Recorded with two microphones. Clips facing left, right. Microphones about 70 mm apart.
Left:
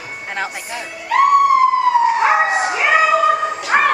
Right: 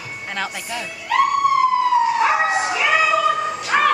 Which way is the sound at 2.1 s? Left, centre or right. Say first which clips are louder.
Left 3 dB; left.